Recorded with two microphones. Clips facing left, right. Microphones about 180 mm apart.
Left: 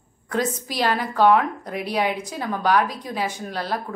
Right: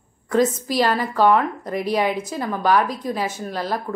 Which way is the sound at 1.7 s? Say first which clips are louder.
Right 3 dB; 10° left (ahead or behind).